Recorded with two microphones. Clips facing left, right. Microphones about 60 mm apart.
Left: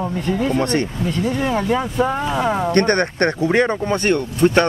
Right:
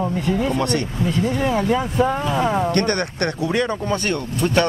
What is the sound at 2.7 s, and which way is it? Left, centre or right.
Speech, left.